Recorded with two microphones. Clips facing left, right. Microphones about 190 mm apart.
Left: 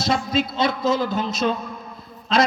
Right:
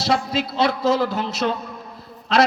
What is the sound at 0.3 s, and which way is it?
A man's voice, 70° right (ahead or behind).